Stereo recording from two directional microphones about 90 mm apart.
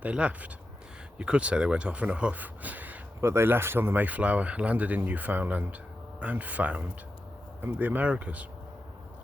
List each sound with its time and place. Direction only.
0.0 s speech: 15° right (ahead or behind)
3.2 s speech: 30° right (ahead or behind)